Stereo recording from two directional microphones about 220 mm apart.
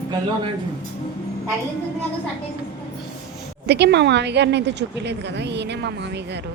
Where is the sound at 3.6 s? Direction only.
50° right (ahead or behind).